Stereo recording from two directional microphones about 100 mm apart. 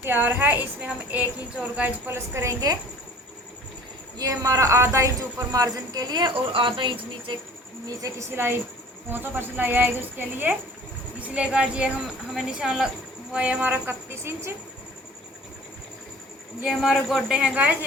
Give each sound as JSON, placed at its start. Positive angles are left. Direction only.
{"t": 0.0, "sound": "a woman's voice", "side_deg": -20}
{"t": 4.2, "sound": "speech", "side_deg": -35}
{"t": 8.0, "sound": "a woman's voice", "side_deg": -25}
{"t": 16.6, "sound": "speech", "side_deg": 0}